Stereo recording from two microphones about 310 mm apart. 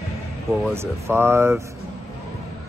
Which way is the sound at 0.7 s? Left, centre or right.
Centre.